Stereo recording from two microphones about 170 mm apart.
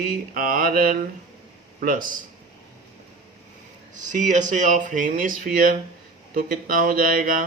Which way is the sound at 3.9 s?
45° right (ahead or behind).